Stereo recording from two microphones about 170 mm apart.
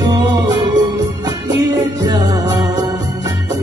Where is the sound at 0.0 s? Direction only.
25° right (ahead or behind).